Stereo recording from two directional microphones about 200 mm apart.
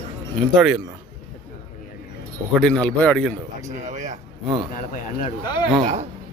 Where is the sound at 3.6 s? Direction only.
35° right (ahead or behind).